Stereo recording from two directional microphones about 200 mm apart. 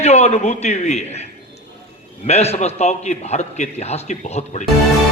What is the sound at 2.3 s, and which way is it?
A man's voice, 30° left (ahead or behind).